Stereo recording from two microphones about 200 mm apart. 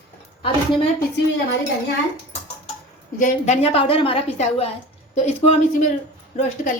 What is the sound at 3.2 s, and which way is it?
A woman's voice, 35° left (ahead or behind).